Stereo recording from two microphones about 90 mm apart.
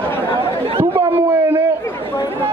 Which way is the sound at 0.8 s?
25° right (ahead or behind).